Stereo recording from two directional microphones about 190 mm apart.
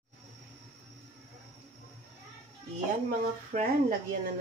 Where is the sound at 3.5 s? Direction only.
45° right (ahead or behind).